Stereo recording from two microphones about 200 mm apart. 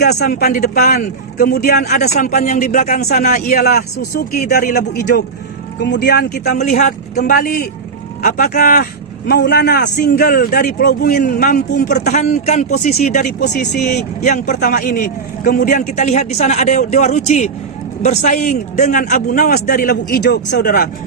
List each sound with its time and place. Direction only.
0.2 s speech: 50° left (ahead or behind)
2.1 s a man's voice: 40° left (ahead or behind); by 6.4 s 55° left (ahead or behind)
6.6 s a man's voice: 40° left (ahead or behind)
13.4 s speech: 55° left (ahead or behind)
13.9 s a man's voice: 40° left (ahead or behind)